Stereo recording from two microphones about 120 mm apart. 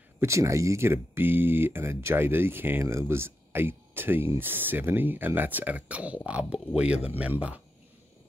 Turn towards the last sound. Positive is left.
turn(degrees=-10)  # may be behind; listen again after turning